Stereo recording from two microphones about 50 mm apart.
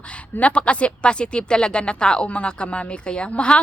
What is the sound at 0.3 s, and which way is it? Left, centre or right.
Speech, left.